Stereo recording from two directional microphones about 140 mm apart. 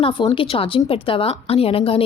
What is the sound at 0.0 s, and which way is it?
A woman's voice, 35° left (ahead or behind).